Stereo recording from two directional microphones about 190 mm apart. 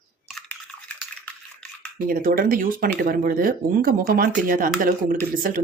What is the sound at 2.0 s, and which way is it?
Speech, 50° right (ahead or behind).